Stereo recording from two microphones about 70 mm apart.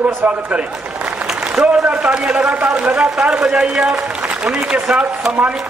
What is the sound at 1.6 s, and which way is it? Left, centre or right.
A man's voice, centre.